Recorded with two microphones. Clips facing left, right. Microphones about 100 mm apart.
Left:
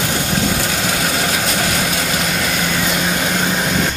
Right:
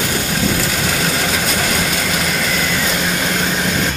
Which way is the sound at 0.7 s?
15° left (ahead or behind).